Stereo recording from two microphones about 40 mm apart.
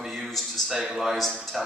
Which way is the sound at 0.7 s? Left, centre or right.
Centre.